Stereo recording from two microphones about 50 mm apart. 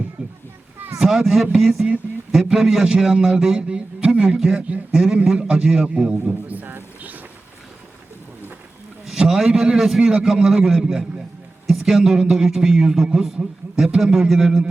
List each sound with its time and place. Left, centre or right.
0.2 s children playing: right
0.9 s a man's voice: centre
6.5 s a sound: right
9.0 s a man's voice: centre